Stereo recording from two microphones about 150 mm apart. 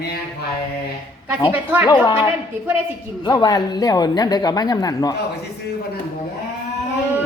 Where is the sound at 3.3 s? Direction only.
25° left (ahead or behind).